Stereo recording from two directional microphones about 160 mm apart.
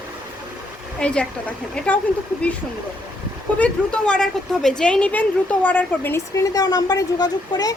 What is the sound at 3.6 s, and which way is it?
A woman's voice, 5° left (ahead or behind).